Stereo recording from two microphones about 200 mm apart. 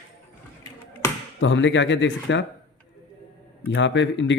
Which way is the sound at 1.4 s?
70° left (ahead or behind).